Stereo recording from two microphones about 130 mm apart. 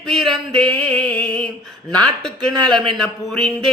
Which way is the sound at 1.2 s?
40° right (ahead or behind).